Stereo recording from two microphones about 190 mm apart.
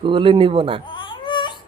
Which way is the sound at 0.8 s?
25° left (ahead or behind).